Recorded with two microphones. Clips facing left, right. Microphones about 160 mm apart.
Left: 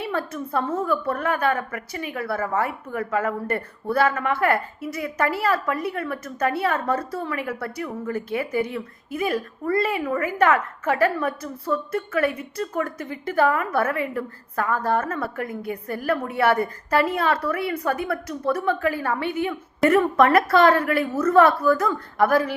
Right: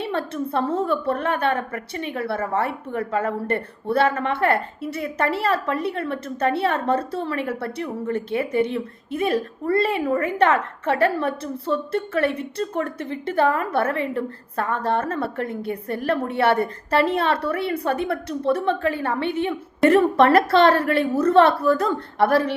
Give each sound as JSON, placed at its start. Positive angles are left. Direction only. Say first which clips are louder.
{"t": 0.0, "sound": "a woman's voice", "louder": "right 2 dB", "side_deg": -25}